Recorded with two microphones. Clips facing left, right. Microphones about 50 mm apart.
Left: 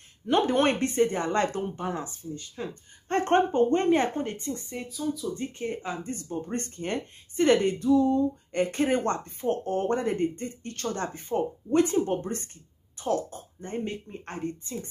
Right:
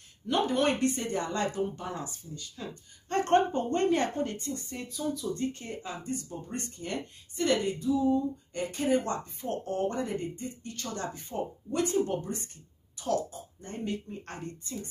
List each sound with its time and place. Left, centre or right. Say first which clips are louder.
0.3 s speech: left 4 dB; left
1.9 s speech: left 5 dB; left
4.8 s speech: left 2 dB; centre
5.3 s speech: left 1 dB; left
7.8 s a sound: left 5 dB; left
8.5 s speech: left 3 dB; left
13.0 s a sound: left 4 dB; left
13.3 s speech: left 6 dB; left